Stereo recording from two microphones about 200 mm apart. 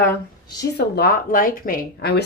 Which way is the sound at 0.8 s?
55° left (ahead or behind).